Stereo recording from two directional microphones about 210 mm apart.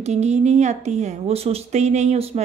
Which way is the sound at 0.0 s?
30° right (ahead or behind).